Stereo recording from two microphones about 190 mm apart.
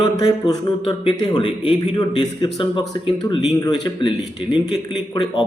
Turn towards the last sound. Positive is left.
turn(degrees=25)  # may be behind; listen again after turning